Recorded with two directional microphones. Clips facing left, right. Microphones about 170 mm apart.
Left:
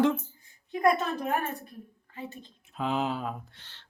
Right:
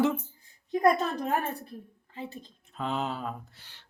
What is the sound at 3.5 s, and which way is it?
Speech, 10° right (ahead or behind).